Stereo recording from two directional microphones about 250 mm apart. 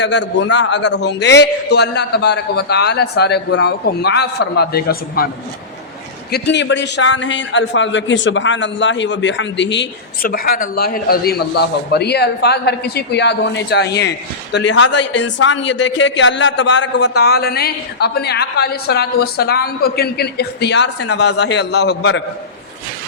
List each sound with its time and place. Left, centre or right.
0.0 s a man's voice: left
6.3 s a man's voice: left